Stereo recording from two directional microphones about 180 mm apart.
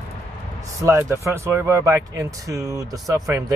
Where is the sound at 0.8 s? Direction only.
15° right (ahead or behind).